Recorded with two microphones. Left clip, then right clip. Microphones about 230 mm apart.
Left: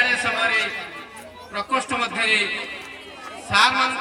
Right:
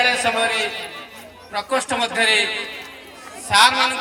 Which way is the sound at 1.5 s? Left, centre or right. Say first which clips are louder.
Right 2 dB; right.